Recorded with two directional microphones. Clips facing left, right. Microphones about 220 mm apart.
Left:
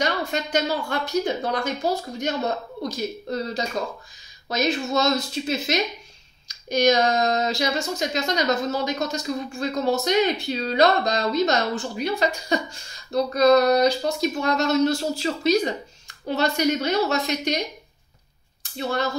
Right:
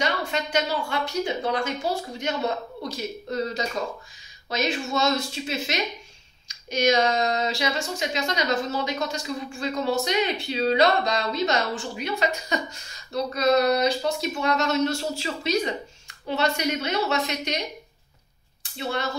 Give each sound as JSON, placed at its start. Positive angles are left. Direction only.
{"t": 0.0, "sound": "speech", "side_deg": 40}
{"t": 18.8, "sound": "speech", "side_deg": 40}